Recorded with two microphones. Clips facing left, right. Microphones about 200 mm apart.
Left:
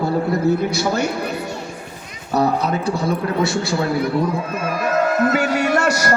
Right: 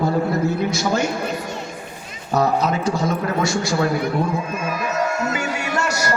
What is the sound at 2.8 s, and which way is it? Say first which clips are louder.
Speech: left 1 dB; 60° left (ahead or behind).